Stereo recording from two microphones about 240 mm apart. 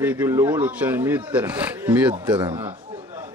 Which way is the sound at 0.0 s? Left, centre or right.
Centre.